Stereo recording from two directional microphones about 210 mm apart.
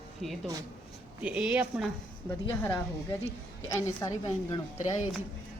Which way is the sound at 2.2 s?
10° left (ahead or behind).